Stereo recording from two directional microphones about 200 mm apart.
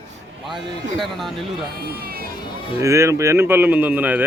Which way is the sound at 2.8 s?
15° right (ahead or behind).